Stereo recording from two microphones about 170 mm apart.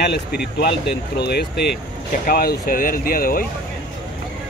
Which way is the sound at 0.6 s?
75° left (ahead or behind).